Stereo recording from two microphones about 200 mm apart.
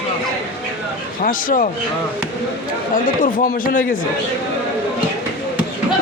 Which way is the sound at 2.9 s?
45° left (ahead or behind).